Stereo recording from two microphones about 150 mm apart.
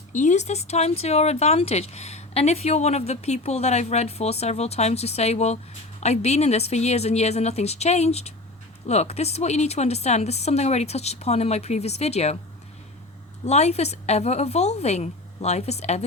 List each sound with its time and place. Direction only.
0.1 s speech: 55° left (ahead or behind)
13.4 s speech: 45° left (ahead or behind)